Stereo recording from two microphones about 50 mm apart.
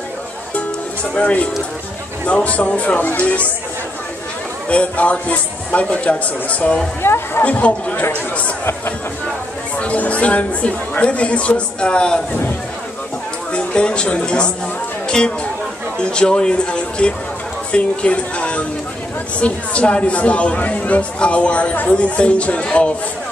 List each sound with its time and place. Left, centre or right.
1.1 s speech: left
4.6 s speech: left
7.0 s speech: left
7.4 s speech: left
9.8 s speech: left
13.5 s speech: left